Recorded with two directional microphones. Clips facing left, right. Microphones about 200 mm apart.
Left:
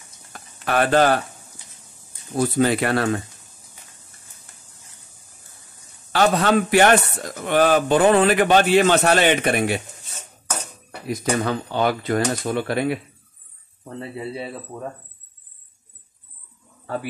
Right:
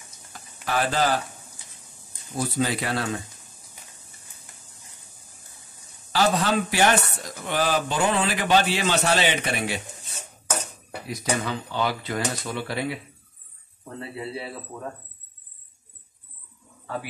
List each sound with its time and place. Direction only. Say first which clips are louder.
0.3 s a sound: left 5 dB; 60° left (ahead or behind)
2.3 s speech: left 7 dB; 60° left (ahead or behind)
6.1 s speech: left 4 dB; 60° left (ahead or behind)
11.1 s speech: left 5 dB; 50° left (ahead or behind)